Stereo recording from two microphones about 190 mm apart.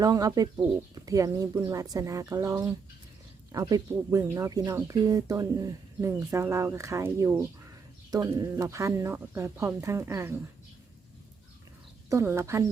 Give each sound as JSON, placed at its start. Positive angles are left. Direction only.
{"t": 0.0, "sound": "speech", "side_deg": -20}
{"t": 12.0, "sound": "speech", "side_deg": -15}